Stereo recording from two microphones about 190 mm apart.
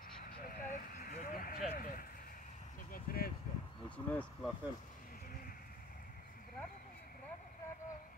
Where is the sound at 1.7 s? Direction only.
45° left (ahead or behind).